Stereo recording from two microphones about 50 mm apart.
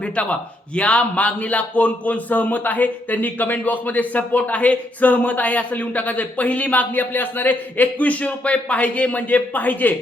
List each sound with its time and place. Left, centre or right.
0.0 s a man's voice: left